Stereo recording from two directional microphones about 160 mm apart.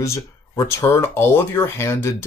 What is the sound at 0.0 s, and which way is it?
Speech, 15° left (ahead or behind).